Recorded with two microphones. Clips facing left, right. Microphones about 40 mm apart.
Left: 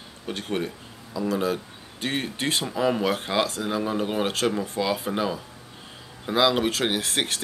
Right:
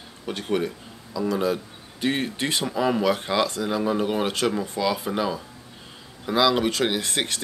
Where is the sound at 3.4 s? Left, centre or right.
Left.